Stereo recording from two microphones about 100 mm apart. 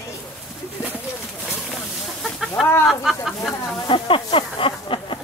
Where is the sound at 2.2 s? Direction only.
Centre (ahead or behind).